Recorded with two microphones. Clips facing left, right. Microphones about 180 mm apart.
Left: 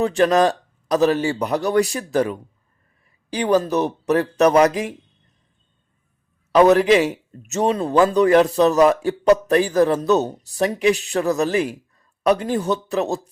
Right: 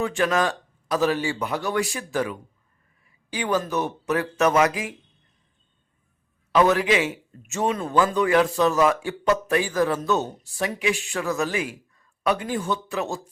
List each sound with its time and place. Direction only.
0.0 s a man's voice: 40° left (ahead or behind)
6.5 s a man's voice: 40° left (ahead or behind)